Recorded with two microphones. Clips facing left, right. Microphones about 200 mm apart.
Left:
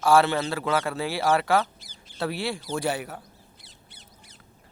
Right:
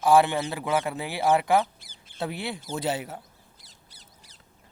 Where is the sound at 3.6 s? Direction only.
40° right (ahead or behind).